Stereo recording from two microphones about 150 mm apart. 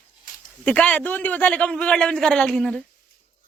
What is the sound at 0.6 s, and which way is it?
A man's voice, 10° left (ahead or behind).